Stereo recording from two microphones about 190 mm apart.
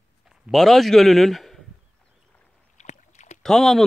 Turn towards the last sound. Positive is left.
turn(degrees=0)  # may be behind; listen again after turning